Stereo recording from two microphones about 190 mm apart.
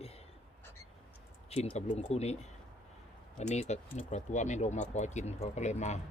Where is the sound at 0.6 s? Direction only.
10° left (ahead or behind).